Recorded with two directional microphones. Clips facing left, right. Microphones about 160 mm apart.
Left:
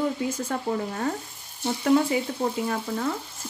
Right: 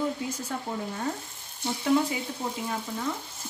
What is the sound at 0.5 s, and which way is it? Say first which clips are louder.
Speech: left 4 dB; 65° left (ahead or behind).